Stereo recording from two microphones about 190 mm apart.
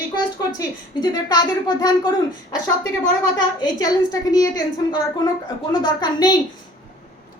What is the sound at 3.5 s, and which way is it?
A woman's voice, 20° left (ahead or behind).